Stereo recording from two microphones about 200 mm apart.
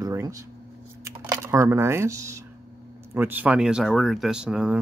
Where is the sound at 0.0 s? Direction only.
15° right (ahead or behind).